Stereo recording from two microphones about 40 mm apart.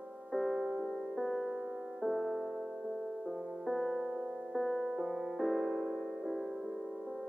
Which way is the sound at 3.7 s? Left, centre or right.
Centre.